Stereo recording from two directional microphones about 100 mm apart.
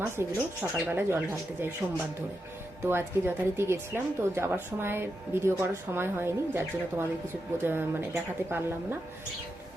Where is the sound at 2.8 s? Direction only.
25° right (ahead or behind).